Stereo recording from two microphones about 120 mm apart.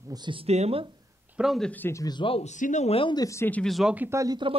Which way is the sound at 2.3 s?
70° left (ahead or behind).